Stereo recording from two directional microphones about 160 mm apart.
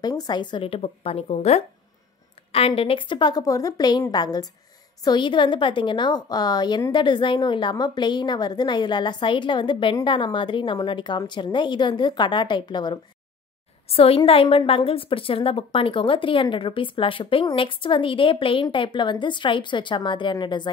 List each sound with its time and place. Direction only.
0.0 s a woman's voice: 25° left (ahead or behind)